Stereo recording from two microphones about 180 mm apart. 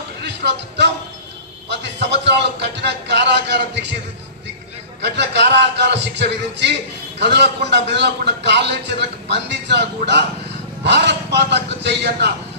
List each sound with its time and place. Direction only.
0.2 s speech: 70° right (ahead or behind)
2.0 s a man's voice: 70° right (ahead or behind)
5.0 s a man's voice: 70° right (ahead or behind)